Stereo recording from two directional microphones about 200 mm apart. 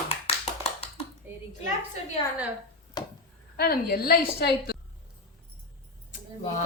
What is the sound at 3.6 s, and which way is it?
A woman's voice, 50° left (ahead or behind).